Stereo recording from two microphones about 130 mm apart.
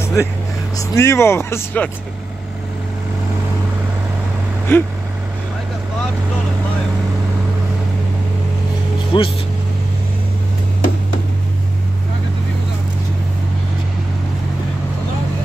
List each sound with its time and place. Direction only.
0.0 s vehicle: 20° left (ahead or behind)
0.7 s speech: 20° left (ahead or behind)
4.7 s speech: 20° left (ahead or behind)
9.1 s speech: 40° left (ahead or behind)